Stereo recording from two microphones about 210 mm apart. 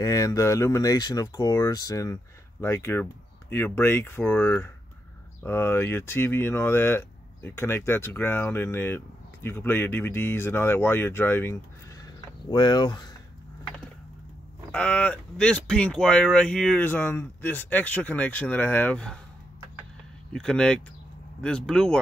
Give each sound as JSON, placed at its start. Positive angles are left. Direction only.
{"t": 0.0, "sound": "speech", "side_deg": 15}
{"t": 12.0, "sound": "a sound", "side_deg": 20}
{"t": 14.7, "sound": "speech", "side_deg": 5}
{"t": 20.3, "sound": "speech", "side_deg": 5}